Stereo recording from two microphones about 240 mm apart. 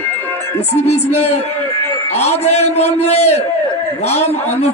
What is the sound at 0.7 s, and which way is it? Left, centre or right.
Music, left.